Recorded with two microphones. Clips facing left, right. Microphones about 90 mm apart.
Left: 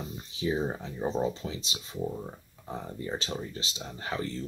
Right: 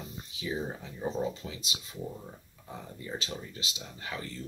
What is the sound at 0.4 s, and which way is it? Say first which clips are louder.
Speech: left 5 dB; 35° left (ahead or behind).